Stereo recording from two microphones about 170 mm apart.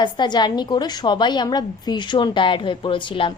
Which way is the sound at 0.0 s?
25° left (ahead or behind).